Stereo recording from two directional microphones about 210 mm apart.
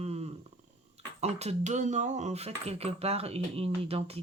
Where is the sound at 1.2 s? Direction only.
30° right (ahead or behind).